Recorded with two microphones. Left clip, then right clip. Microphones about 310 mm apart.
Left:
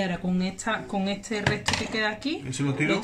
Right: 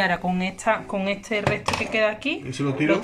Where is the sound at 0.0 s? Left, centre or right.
Centre.